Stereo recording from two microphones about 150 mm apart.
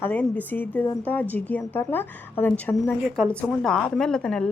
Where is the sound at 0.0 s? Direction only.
10° left (ahead or behind).